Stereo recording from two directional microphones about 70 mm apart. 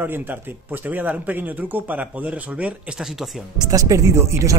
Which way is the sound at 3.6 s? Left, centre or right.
Right.